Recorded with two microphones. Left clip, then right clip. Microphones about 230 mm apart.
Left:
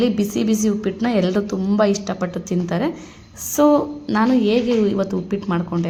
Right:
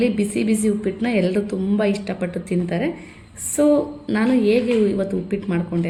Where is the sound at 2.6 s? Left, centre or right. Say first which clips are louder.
Left 3 dB; left.